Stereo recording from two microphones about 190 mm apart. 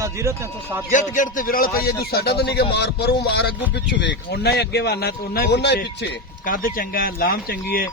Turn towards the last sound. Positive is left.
turn(degrees=50)  # may be behind; listen again after turning